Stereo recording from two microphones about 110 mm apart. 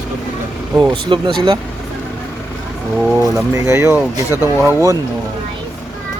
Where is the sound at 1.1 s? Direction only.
50° right (ahead or behind).